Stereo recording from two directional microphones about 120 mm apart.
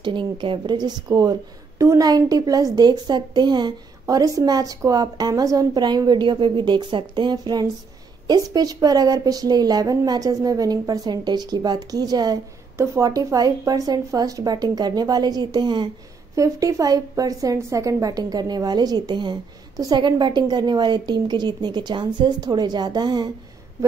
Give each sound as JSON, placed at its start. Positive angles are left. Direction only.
{"t": 0.0, "sound": "a woman's voice", "side_deg": -45}
{"t": 16.3, "sound": "a woman's voice", "side_deg": -25}